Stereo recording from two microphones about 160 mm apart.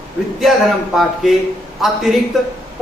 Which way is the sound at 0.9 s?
Centre (ahead or behind).